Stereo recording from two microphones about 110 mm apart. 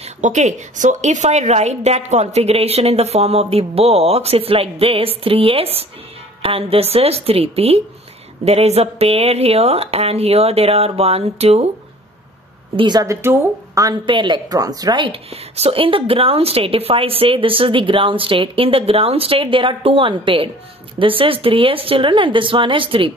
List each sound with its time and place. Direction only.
0.0 s a woman's voice: 90° right; by 11.7 s 70° right (ahead or behind)
12.7 s speech: 45° right (ahead or behind)
13.0 s speech: 25° right (ahead or behind)
14.0 s a woman's voice: 45° right (ahead or behind)
15.0 s a woman's voice: 65° right (ahead or behind); by 23.1 s 50° right (ahead or behind)